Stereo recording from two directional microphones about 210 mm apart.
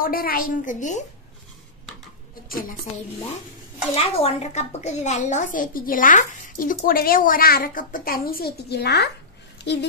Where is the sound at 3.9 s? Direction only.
30° left (ahead or behind).